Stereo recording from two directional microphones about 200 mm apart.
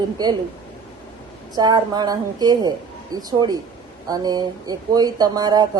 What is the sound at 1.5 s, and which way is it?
Speech, 20° right (ahead or behind).